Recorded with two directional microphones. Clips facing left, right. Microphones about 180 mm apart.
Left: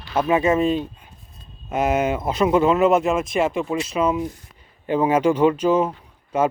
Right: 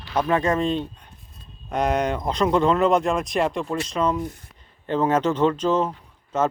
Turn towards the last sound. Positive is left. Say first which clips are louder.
# left 2 dB
turn(degrees=10)  # may be behind; listen again after turning